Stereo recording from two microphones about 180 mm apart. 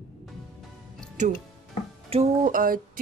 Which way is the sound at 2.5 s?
50° right (ahead or behind).